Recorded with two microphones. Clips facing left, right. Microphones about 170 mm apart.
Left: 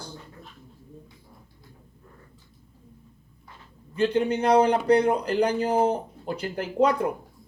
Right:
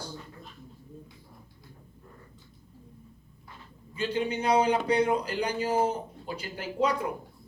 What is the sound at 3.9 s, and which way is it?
Speech, 55° left (ahead or behind).